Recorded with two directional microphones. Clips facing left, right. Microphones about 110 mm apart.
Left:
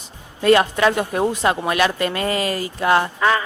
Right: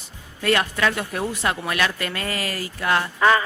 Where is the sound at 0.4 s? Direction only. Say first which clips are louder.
Left 6 dB; 25° left (ahead or behind).